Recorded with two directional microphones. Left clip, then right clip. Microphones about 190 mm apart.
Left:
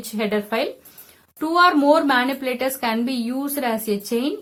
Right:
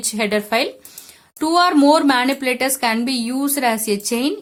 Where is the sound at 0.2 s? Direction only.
35° right (ahead or behind).